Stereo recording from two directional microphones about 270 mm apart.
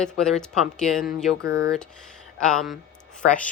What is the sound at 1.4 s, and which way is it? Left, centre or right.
Speech, centre.